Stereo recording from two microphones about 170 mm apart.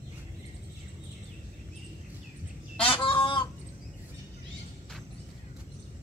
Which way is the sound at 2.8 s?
30° left (ahead or behind).